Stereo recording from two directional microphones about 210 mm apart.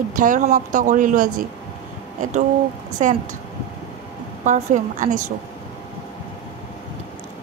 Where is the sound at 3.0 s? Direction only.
35° right (ahead or behind).